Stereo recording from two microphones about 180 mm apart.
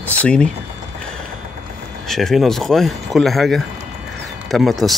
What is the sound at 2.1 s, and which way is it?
Speech, centre (ahead or behind).